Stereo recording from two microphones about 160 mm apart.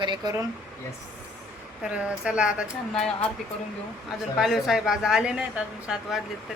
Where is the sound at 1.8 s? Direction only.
5° right (ahead or behind).